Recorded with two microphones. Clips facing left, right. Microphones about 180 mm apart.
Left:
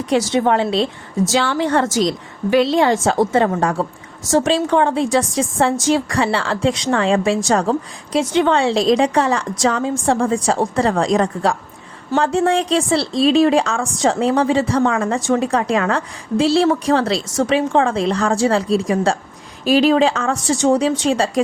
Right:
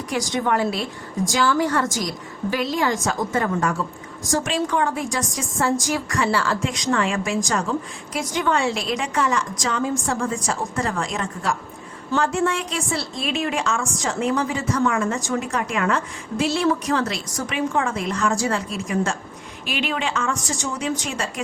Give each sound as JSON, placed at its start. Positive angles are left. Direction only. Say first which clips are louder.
{"t": 0.3, "sound": "a woman's voice", "louder": "left 3 dB", "side_deg": 25}